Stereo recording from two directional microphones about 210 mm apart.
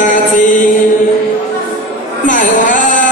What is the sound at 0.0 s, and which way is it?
Mantra, 40° left (ahead or behind).